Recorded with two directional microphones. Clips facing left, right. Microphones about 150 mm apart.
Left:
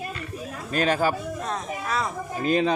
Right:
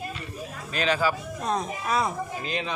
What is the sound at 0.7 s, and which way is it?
Speech, 45° left (ahead or behind).